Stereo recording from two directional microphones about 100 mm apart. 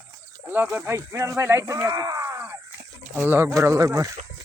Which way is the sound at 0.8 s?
30° right (ahead or behind).